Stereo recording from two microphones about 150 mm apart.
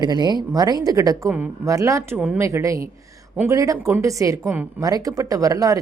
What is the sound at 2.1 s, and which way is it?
Speech, 5° right (ahead or behind).